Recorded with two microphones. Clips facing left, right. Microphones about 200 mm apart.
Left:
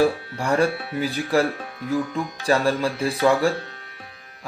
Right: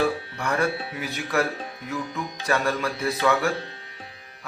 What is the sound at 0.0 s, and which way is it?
Speech, 30° left (ahead or behind).